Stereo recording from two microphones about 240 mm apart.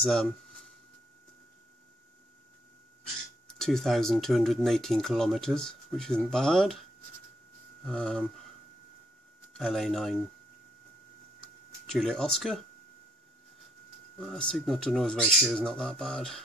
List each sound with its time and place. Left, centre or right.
0.0 s speech: centre
3.4 s speech: centre
7.8 s speech: centre
9.6 s speech: centre
11.4 s a sound: centre
14.2 s speech: centre